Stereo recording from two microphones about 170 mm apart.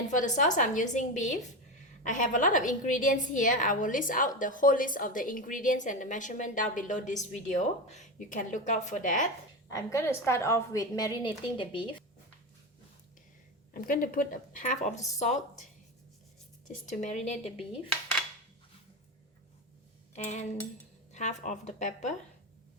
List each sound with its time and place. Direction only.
0.1 s a woman's voice: 45° left (ahead or behind)
9.7 s a woman's voice: 15° left (ahead or behind)
13.8 s a woman's voice: 60° left (ahead or behind); by 15.4 s 45° left (ahead or behind)
16.8 s a woman's voice: 45° left (ahead or behind)
20.1 s a woman's voice: 45° left (ahead or behind)